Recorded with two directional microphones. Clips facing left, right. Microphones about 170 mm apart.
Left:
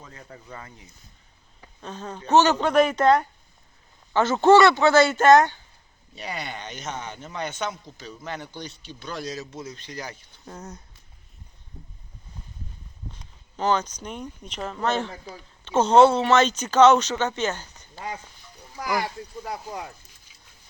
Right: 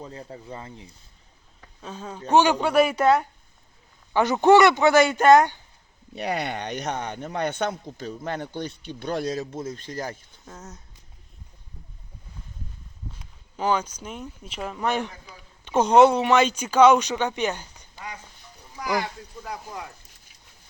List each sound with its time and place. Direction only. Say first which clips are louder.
0.0 s speech: right 6 dB; 30° right (ahead or behind)
1.8 s speech: even; 10° right (ahead or behind)
6.1 s a man's voice: right 6 dB; 60° right (ahead or behind)
10.4 s speech: left 4 dB; centre (ahead or behind)
13.1 s speech: left 1 dB; 10° right (ahead or behind)
19.0 s speech: left 3 dB; 35° left (ahead or behind)